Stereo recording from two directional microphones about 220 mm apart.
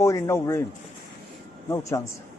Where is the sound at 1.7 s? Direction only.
15° left (ahead or behind).